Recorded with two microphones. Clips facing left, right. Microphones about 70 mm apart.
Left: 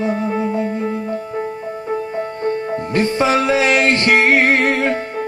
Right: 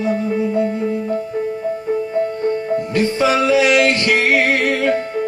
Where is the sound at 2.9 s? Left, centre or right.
Left.